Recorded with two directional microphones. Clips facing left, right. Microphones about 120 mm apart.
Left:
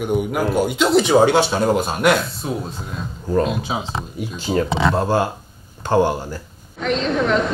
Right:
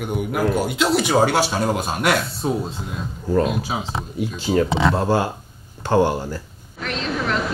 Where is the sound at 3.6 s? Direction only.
Centre (ahead or behind).